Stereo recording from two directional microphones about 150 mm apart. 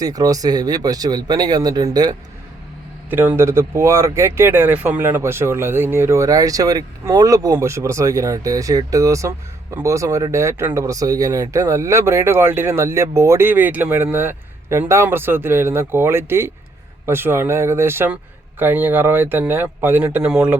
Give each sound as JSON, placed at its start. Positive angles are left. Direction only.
{"t": 0.0, "sound": "speech", "side_deg": -25}
{"t": 3.1, "sound": "speech", "side_deg": -15}